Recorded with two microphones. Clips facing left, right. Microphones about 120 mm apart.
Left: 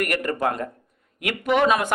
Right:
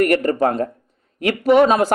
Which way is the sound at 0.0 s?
35° right (ahead or behind).